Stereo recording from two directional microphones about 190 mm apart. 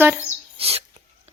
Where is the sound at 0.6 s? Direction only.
30° right (ahead or behind).